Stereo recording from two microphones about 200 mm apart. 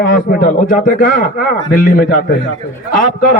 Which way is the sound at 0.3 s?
40° left (ahead or behind).